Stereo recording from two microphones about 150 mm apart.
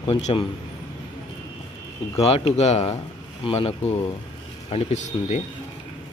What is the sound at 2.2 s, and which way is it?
A man's voice, 40° left (ahead or behind).